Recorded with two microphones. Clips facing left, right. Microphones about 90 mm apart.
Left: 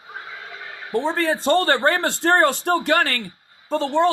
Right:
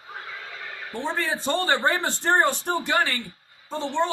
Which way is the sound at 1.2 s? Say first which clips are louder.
Left 6 dB; 60° left (ahead or behind).